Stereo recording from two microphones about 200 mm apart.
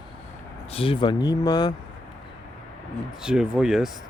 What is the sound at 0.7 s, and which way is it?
Speech, 25° left (ahead or behind).